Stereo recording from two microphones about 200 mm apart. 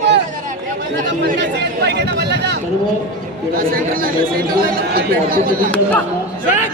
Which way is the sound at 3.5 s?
45° right (ahead or behind).